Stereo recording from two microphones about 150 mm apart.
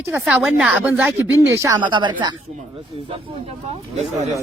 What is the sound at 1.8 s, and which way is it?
Speech, 30° right (ahead or behind).